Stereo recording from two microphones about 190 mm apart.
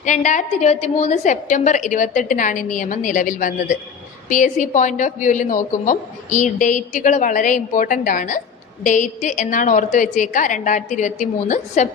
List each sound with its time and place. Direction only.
0.0 s a woman's voice: 40° left (ahead or behind)